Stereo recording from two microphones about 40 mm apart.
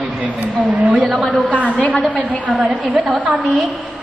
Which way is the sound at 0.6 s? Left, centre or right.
Right.